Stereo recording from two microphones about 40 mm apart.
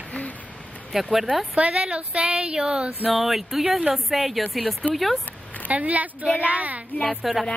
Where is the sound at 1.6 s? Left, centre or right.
Right.